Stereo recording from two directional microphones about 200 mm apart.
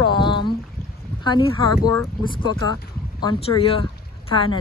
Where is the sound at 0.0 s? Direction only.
25° left (ahead or behind).